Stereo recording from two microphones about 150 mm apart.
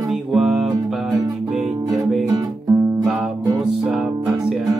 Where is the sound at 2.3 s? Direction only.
25° right (ahead or behind).